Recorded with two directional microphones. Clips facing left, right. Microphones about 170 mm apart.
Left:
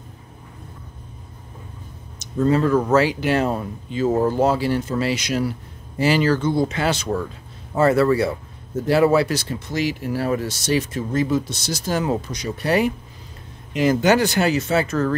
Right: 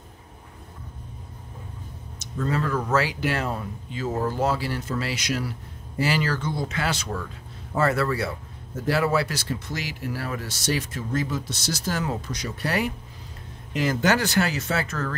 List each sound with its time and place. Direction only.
2.1 s speech: 25° left (ahead or behind)